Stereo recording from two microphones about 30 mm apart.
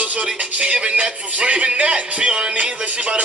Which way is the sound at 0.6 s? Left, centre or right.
Right.